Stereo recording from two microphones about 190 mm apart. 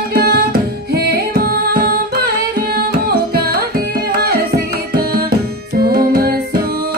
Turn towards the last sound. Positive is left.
turn(degrees=-55)  # may be behind; listen again after turning